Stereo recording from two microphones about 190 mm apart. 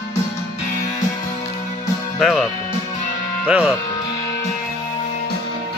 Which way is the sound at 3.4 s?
5° right (ahead or behind).